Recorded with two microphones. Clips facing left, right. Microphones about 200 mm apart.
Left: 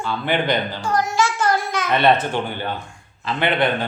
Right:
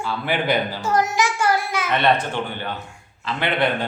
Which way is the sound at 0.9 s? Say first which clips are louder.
Even; 20° right (ahead or behind).